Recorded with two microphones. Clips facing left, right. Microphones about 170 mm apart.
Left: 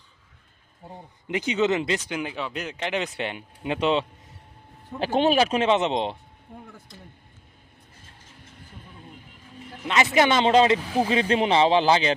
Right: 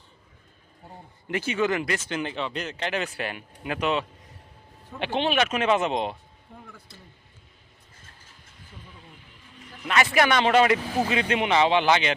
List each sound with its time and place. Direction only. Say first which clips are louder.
0.9 s speech: left 1 dB; 20° left (ahead or behind)
4.9 s speech: left 4 dB; 40° left (ahead or behind)
9.8 s speech: left 2 dB; 20° left (ahead or behind)